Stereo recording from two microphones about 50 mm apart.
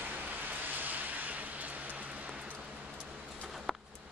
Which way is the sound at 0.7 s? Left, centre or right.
Right.